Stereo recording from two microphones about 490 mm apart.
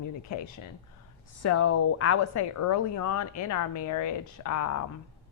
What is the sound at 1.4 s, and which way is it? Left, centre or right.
A woman's voice, left.